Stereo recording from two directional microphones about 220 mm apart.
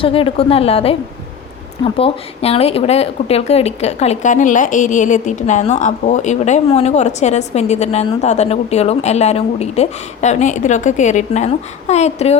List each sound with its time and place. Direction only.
0.0 s a woman's voice: 25° left (ahead or behind)